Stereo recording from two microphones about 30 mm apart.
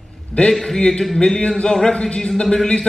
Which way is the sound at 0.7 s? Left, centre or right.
Left.